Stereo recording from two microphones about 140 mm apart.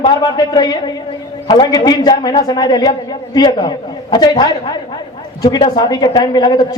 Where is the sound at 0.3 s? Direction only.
30° left (ahead or behind).